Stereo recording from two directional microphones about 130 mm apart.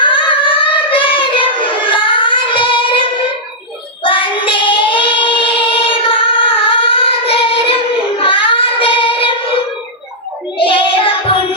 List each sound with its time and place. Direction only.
0.0 s child singing: 40° left (ahead or behind)
10.6 s child singing: 45° left (ahead or behind)